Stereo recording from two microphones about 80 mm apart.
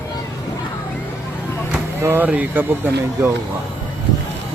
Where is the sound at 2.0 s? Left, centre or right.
Right.